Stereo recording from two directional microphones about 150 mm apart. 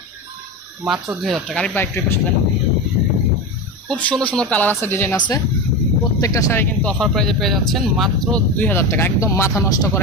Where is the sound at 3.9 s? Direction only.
5° left (ahead or behind).